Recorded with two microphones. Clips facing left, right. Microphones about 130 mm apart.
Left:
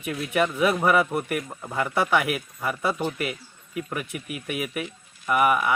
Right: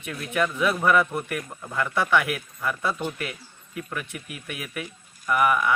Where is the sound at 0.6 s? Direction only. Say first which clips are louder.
Even; 20° left (ahead or behind).